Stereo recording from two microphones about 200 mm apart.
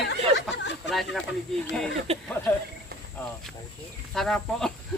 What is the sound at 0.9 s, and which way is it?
Speech, centre (ahead or behind).